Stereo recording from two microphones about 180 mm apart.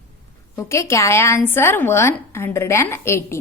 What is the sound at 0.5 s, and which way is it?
A woman's voice, 15° left (ahead or behind).